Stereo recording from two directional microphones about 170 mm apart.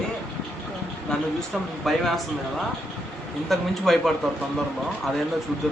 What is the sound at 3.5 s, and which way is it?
Speech, centre (ahead or behind).